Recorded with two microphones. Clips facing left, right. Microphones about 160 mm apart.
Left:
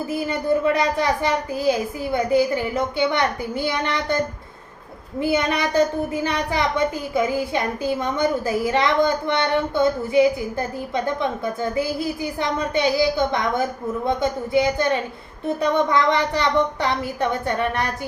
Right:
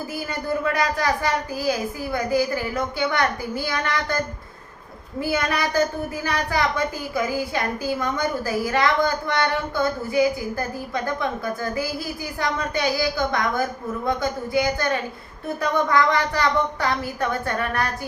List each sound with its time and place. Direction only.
0.1 s a woman's voice: 25° left (ahead or behind)
5.2 s a woman's voice: 20° left (ahead or behind)